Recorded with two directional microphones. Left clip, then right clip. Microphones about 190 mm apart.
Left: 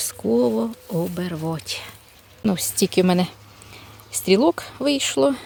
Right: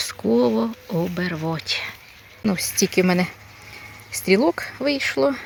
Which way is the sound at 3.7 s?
30° left (ahead or behind).